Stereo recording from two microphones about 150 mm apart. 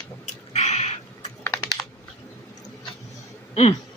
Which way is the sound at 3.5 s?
45° left (ahead or behind).